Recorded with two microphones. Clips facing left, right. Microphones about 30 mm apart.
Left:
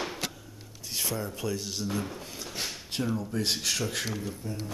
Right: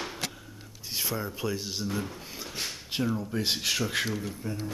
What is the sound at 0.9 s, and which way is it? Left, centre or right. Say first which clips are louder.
Speech: even; centre.